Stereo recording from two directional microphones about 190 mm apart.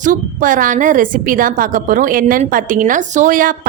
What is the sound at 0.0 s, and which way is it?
Speech, 45° right (ahead or behind).